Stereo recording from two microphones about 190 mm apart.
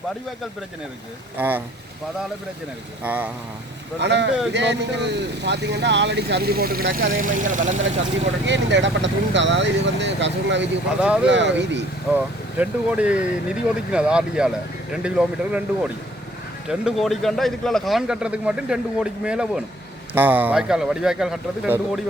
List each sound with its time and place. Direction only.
1.4 s speech: 10° right (ahead or behind)
3.0 s speech: 10° right (ahead or behind)
4.0 s speech: 65° right (ahead or behind); by 7.8 s 40° right (ahead or behind)
8.4 s speech: 70° right (ahead or behind)
11.0 s speech: 5° right (ahead or behind)
11.3 s speech: 70° right (ahead or behind)
12.5 s a man's voice: 5° right (ahead or behind)